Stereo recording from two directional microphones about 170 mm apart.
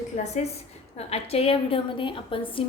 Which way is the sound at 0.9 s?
35° left (ahead or behind).